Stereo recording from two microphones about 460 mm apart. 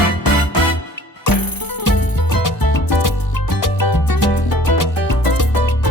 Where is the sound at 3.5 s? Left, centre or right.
Left.